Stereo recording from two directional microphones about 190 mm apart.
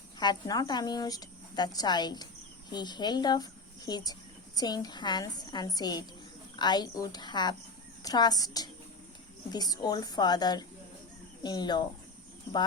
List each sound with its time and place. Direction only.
0.2 s a woman's voice: 20° left (ahead or behind)